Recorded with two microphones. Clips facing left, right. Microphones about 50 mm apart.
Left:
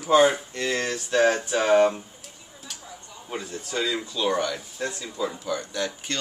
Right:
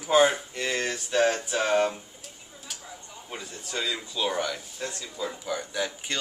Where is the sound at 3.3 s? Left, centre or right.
Centre.